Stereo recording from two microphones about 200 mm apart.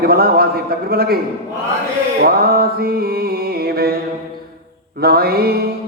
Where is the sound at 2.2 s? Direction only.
50° right (ahead or behind).